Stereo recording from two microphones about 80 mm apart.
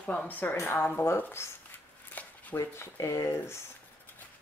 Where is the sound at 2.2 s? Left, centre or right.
Centre.